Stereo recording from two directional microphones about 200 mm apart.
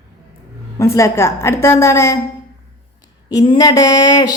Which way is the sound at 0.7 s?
15° left (ahead or behind).